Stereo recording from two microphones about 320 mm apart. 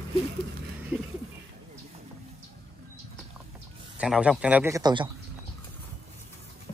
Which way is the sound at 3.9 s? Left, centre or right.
Centre.